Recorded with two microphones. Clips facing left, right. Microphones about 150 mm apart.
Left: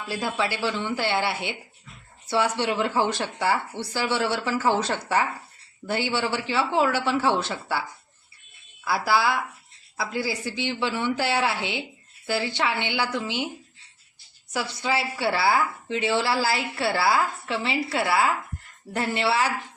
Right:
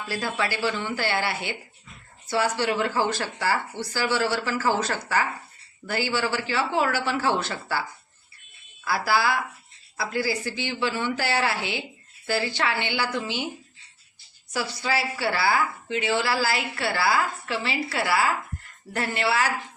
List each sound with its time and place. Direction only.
0.1 s a woman's voice: 20° left (ahead or behind)
8.8 s a woman's voice: 20° left (ahead or behind)
12.2 s speech: 10° left (ahead or behind)
12.5 s a woman's voice: 20° left (ahead or behind)
14.5 s a woman's voice: 20° left (ahead or behind)